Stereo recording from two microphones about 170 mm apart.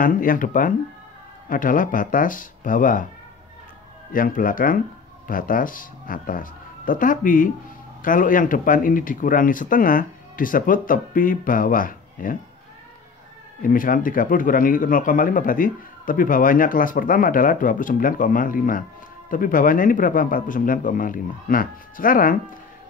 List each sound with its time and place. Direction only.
0.0 s speech: 55° left (ahead or behind)
4.1 s speech: 55° left (ahead or behind)
13.6 s speech: 55° left (ahead or behind)